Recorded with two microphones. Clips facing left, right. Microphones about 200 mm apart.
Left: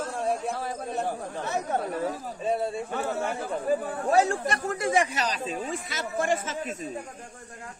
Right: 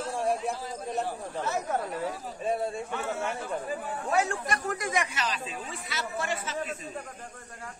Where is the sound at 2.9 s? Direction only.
35° left (ahead or behind).